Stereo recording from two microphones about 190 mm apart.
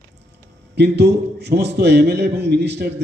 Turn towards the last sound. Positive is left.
turn(degrees=-60)  # may be behind; listen again after turning